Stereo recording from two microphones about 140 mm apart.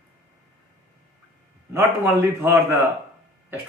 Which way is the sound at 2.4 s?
15° right (ahead or behind).